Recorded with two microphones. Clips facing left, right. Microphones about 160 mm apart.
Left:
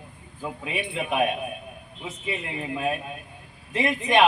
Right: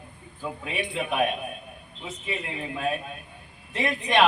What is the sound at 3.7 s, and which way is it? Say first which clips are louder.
Speech: left 2 dB; 20° left (ahead or behind).